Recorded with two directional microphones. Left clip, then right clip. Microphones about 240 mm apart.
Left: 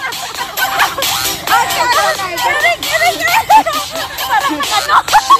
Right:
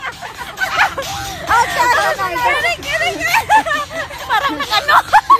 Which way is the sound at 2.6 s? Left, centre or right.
Centre.